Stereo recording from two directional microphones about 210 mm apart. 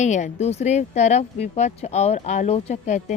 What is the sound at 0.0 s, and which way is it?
A woman's voice, 35° left (ahead or behind).